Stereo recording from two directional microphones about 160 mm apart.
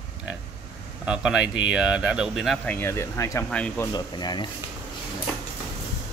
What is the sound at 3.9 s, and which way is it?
Speech, 25° left (ahead or behind).